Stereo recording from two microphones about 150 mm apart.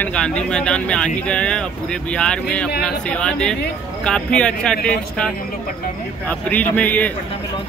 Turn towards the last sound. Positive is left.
turn(degrees=10)  # may be behind; listen again after turning